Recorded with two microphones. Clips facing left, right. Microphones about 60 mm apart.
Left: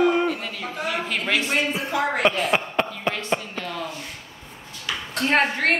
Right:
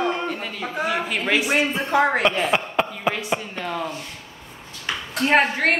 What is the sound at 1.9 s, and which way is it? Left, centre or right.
Speech, right.